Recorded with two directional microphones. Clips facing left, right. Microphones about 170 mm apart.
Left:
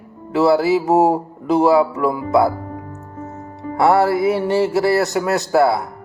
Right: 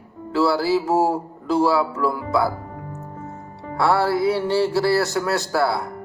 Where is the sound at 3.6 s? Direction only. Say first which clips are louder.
Left 5 dB; 20° left (ahead or behind).